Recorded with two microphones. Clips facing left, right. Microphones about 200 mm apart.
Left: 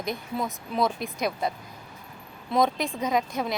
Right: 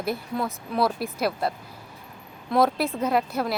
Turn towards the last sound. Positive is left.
turn(degrees=-5)  # may be behind; listen again after turning